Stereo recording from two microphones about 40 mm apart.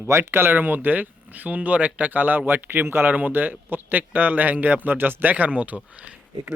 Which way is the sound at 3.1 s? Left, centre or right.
Right.